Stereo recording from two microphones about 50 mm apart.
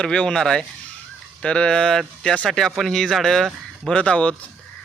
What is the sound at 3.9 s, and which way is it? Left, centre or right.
Speech, left.